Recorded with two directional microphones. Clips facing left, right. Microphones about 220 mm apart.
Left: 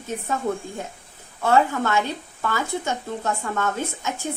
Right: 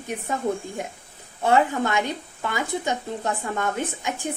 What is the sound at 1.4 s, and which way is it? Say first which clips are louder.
A woman's voice: even; 15° right (ahead or behind).